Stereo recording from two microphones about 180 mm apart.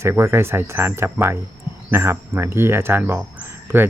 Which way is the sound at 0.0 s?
15° right (ahead or behind).